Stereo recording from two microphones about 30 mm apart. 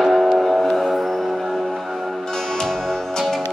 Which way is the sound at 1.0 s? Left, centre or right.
Centre.